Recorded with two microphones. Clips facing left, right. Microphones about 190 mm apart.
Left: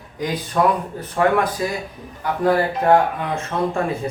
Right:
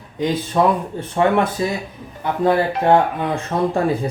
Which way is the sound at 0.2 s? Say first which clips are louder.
Right 2 dB; 25° right (ahead or behind).